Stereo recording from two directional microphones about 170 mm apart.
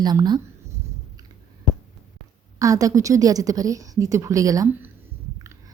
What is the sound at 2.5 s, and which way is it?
A woman's voice, 20° right (ahead or behind).